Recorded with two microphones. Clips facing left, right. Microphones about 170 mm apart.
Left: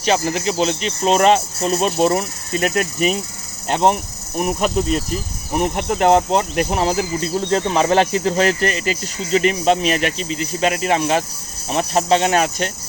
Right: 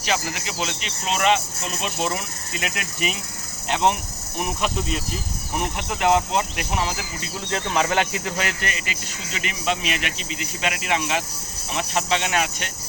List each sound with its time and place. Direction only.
0.0 s speech: 35° left (ahead or behind)
4.4 s cricket: 45° left (ahead or behind)
5.5 s speech: 40° left (ahead or behind)